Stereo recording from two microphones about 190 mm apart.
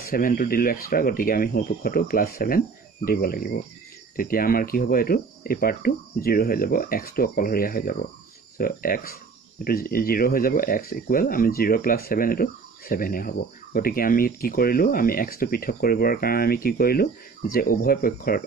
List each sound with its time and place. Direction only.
0.0 s speech: 50° left (ahead or behind)